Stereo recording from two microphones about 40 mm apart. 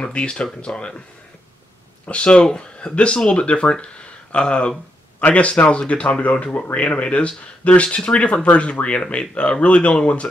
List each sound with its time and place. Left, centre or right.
0.0 s speech: left
2.0 s speech: left